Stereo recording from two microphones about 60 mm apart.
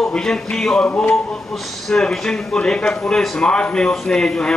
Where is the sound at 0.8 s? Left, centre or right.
Left.